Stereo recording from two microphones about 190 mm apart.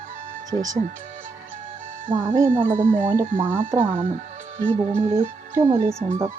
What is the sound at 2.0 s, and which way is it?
Speech, 40° right (ahead or behind).